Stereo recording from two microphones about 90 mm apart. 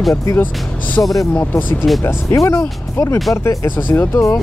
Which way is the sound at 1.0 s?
25° left (ahead or behind).